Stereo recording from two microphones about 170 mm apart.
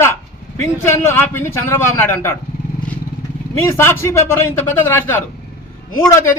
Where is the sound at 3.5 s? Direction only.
15° left (ahead or behind).